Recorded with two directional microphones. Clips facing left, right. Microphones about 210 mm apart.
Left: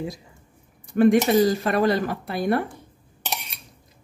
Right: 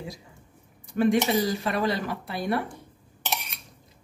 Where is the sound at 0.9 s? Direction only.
50° left (ahead or behind).